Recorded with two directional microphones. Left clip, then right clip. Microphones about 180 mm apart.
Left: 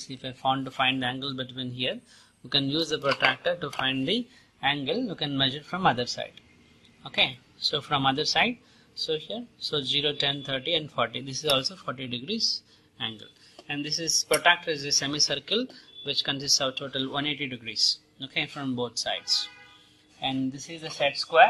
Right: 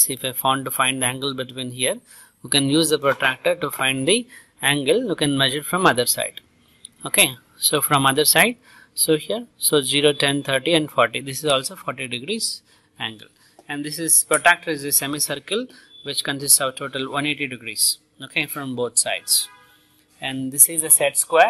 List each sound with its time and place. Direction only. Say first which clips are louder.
0.0 s speech: right 7 dB; 55° right (ahead or behind)